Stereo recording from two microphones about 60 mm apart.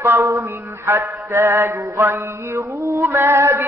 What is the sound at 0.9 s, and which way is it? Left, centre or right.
Female singing, right.